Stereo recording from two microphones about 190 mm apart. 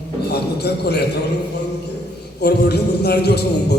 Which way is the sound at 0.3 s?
60° left (ahead or behind).